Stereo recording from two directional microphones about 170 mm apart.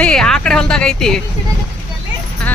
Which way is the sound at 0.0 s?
5° left (ahead or behind).